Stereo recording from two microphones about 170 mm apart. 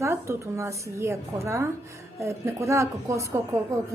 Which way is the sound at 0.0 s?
15° right (ahead or behind).